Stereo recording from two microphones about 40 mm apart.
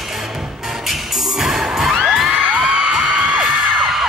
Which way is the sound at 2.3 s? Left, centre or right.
Right.